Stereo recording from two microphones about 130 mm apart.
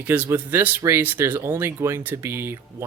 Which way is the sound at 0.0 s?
10° right (ahead or behind).